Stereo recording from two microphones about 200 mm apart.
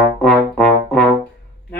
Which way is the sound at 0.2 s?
Centre (ahead or behind).